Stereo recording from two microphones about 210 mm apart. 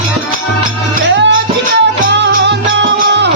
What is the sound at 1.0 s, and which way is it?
Music, 60° right (ahead or behind).